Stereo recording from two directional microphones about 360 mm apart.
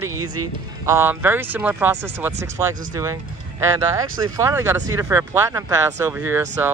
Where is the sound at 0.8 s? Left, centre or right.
Centre.